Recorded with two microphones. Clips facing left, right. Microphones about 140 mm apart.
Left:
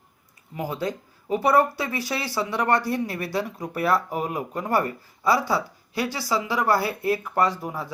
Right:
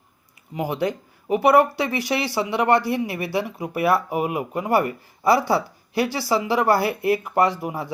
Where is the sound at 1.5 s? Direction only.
70° right (ahead or behind).